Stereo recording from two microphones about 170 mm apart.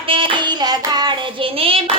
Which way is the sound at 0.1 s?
30° right (ahead or behind).